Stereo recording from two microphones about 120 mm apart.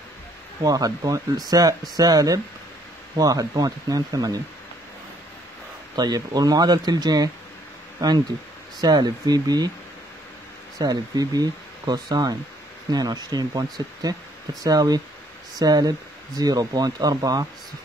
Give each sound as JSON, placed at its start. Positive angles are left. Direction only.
{"t": 0.6, "sound": "speech", "side_deg": -30}
{"t": 5.9, "sound": "speech", "side_deg": -35}
{"t": 10.8, "sound": "speech", "side_deg": -30}